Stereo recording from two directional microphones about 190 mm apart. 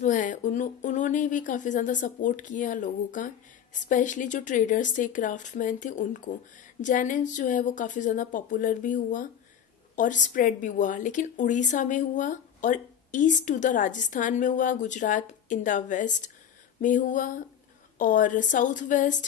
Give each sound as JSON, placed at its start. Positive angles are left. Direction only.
{"t": 0.0, "sound": "a woman's voice", "side_deg": 40}